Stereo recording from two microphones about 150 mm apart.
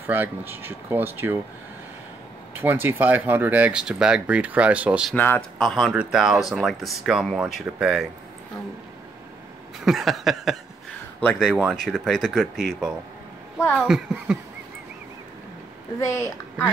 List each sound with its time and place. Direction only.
0.0 s speech: 15° right (ahead or behind)
2.5 s speech: 15° right (ahead or behind)
5.1 s speech: 15° left (ahead or behind)
5.6 s speech: centre (ahead or behind)
9.8 s speech: centre (ahead or behind)
16.0 s speech: 20° left (ahead or behind)